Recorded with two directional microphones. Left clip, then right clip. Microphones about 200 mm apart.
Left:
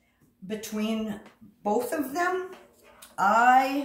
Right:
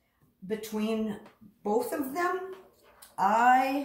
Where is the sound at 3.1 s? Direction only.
15° left (ahead or behind).